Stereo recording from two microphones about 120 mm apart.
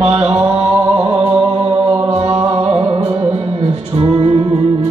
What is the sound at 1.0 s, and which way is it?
Music, 35° right (ahead or behind).